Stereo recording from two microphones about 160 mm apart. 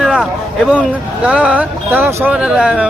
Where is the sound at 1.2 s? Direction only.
5° right (ahead or behind).